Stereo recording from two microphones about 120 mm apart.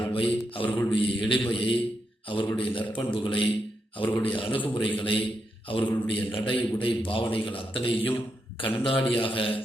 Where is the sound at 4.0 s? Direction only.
15° left (ahead or behind).